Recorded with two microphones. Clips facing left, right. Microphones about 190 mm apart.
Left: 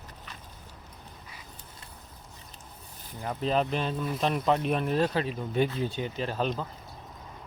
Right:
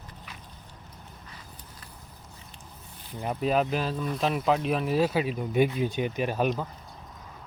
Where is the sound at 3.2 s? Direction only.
15° right (ahead or behind).